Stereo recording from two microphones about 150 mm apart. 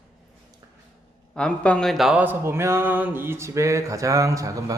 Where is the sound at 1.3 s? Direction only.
10° left (ahead or behind).